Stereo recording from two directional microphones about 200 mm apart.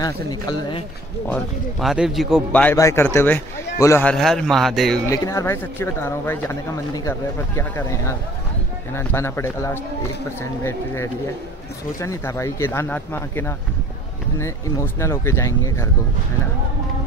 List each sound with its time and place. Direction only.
0.0 s speech: 20° left (ahead or behind)
1.2 s a man's voice: 5° left (ahead or behind)
5.1 s speech: 15° left (ahead or behind)